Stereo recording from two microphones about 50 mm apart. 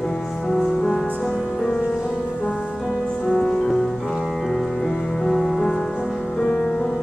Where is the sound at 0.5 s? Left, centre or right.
Centre.